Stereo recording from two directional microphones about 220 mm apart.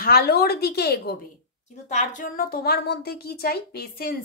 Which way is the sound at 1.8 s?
35° left (ahead or behind).